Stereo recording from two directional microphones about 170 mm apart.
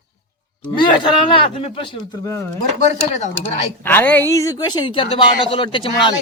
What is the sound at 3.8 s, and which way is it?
Speech, 10° left (ahead or behind).